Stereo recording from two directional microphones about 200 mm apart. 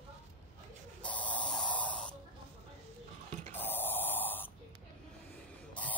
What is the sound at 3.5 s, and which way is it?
Gasp, 10° left (ahead or behind).